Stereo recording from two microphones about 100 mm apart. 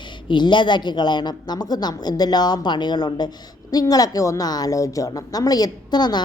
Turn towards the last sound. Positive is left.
turn(degrees=45)  # may be behind; listen again after turning